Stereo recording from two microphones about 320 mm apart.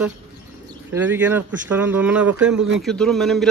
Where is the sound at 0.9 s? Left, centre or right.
Centre.